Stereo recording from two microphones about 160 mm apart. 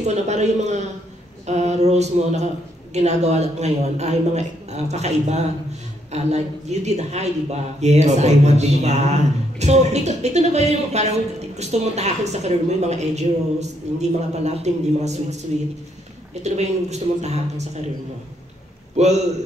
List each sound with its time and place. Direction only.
0.0 s a man's voice: 45° right (ahead or behind)
16.4 s a man's voice: 45° right (ahead or behind)
18.9 s a man's voice: 45° right (ahead or behind)